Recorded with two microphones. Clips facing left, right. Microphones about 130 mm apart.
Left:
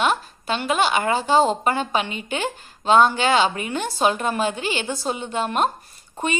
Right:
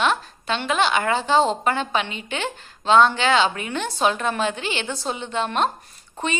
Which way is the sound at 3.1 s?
45° left (ahead or behind).